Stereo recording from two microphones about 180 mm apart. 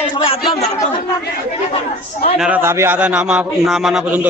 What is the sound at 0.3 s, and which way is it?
Speech, 30° left (ahead or behind).